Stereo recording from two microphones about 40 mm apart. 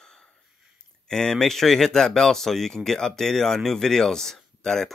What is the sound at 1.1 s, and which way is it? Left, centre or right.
Speech, centre.